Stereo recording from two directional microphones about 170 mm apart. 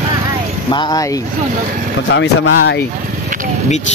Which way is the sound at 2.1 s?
90° left.